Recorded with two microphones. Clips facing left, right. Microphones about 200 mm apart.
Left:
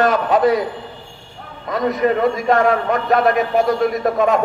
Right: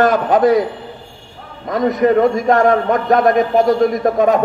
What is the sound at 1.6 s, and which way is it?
A man's voice, 45° right (ahead or behind).